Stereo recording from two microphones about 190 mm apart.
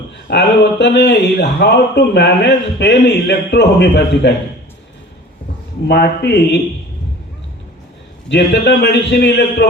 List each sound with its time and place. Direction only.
0.3 s speech: 65° left (ahead or behind)
5.9 s speech: 60° left (ahead or behind)
8.3 s speech: 65° left (ahead or behind)